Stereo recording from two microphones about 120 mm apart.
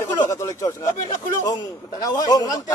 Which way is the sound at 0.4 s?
25° left (ahead or behind).